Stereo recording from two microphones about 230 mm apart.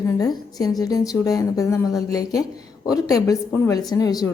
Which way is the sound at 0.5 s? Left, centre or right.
Centre.